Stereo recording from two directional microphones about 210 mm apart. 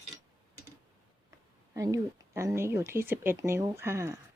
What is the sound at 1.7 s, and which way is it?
Speech, 15° right (ahead or behind).